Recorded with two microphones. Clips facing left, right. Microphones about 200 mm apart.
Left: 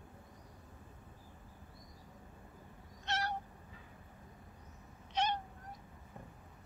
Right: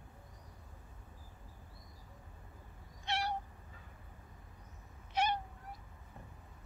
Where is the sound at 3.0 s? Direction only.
10° right (ahead or behind).